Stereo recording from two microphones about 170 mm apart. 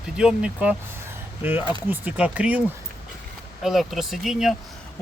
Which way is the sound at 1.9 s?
10° right (ahead or behind).